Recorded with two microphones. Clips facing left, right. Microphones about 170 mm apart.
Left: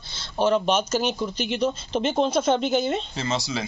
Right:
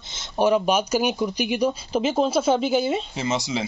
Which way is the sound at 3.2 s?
20° right (ahead or behind).